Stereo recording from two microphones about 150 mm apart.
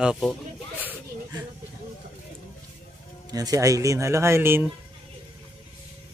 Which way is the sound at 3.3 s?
25° right (ahead or behind).